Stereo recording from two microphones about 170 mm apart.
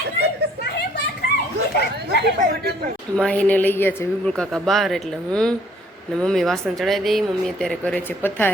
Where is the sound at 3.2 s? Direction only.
5° left (ahead or behind).